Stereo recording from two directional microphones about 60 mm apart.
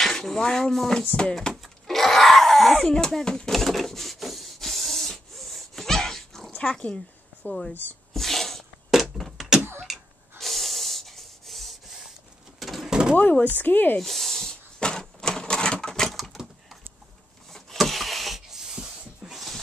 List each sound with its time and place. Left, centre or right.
0.0 s speech: centre
1.3 s speech: centre
3.5 s printer: centre
6.5 s speech: centre
7.4 s speech: left
8.1 s a sound: centre
13.1 s speech: left
13.9 s a sound: centre
19.3 s dog: centre